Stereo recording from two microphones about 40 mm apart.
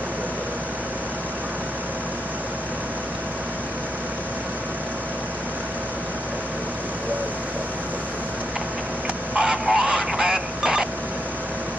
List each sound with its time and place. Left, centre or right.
9.4 s vehicle: centre